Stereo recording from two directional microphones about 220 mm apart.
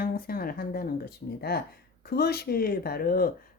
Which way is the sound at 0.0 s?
40° left (ahead or behind).